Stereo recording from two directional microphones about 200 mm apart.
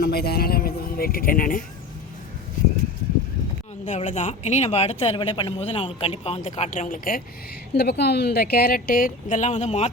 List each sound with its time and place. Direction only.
0.0 s speech: 50° left (ahead or behind)
3.8 s speech: 35° left (ahead or behind)
7.8 s speech: 55° left (ahead or behind); by 9.9 s 35° left (ahead or behind)